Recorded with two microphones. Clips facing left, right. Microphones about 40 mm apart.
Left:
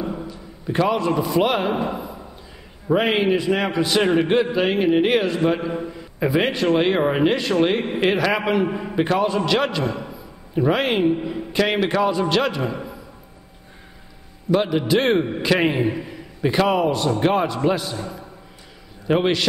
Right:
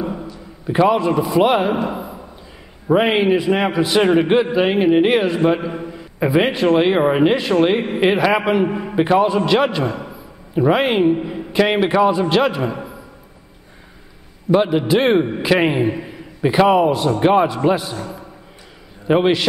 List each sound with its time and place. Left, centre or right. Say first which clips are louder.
0.7 s a man's voice: right 5 dB; centre
2.9 s a man's voice: right 4 dB; centre
14.5 s a man's voice: right 4 dB; centre